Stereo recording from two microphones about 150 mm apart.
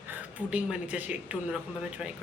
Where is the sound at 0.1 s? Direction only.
10° right (ahead or behind).